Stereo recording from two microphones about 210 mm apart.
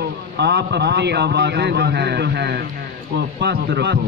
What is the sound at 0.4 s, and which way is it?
A man's voice, 55° right (ahead or behind).